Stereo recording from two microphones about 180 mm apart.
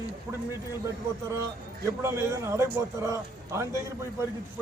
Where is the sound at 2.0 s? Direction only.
15° right (ahead or behind).